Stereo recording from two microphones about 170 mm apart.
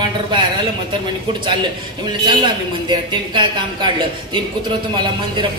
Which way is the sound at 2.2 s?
25° right (ahead or behind).